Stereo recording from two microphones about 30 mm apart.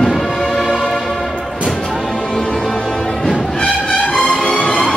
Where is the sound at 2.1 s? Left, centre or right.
Left.